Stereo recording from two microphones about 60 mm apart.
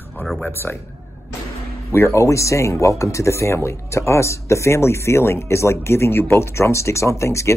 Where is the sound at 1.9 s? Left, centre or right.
Left.